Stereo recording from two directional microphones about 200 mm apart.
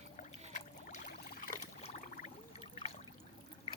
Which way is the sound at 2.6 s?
30° left (ahead or behind).